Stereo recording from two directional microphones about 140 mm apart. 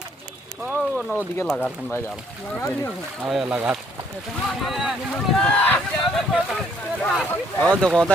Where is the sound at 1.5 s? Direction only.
5° left (ahead or behind).